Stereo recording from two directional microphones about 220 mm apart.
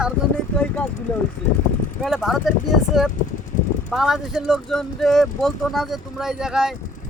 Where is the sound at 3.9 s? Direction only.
Centre (ahead or behind).